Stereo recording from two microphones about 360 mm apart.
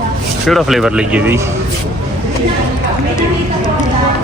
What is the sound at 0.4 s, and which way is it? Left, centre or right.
Speech, centre.